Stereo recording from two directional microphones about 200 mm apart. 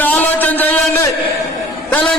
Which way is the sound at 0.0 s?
10° left (ahead or behind).